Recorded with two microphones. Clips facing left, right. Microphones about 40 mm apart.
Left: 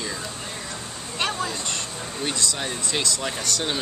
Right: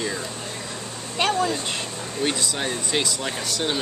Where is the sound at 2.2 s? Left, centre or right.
Centre.